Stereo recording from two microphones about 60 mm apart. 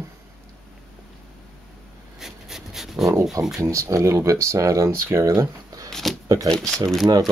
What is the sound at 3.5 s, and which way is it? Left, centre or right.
Speech, right.